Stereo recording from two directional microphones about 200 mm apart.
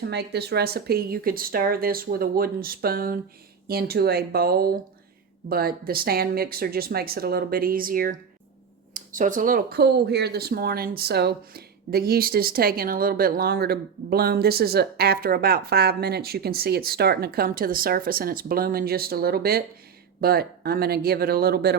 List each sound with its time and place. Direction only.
0.0 s speech: 55° right (ahead or behind)